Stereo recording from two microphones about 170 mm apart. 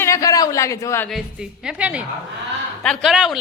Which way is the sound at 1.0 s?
Centre (ahead or behind).